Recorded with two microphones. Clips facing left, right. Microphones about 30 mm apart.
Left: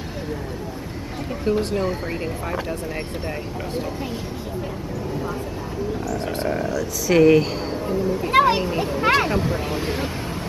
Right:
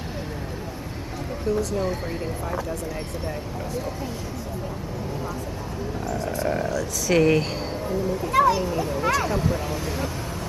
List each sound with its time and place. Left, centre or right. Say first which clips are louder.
1.4 s speech: left 3 dB; left
6.1 s speech: right 1 dB; left
6.5 s speech: left 1 dB; centre
8.3 s speech: left 2 dB; left
8.6 s speech: left 2 dB; left
9.0 s speech: left 6 dB; left
9.4 s speech: left 2 dB; left